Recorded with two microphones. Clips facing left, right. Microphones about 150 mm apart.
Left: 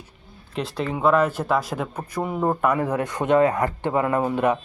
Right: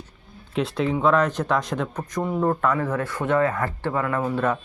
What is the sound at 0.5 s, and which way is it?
Speech, centre (ahead or behind).